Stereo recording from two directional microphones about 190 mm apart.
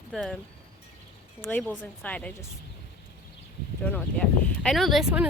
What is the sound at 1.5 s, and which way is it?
Speech, 5° left (ahead or behind).